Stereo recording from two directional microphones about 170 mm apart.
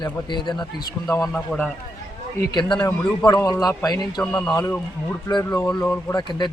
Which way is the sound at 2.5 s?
25° left (ahead or behind).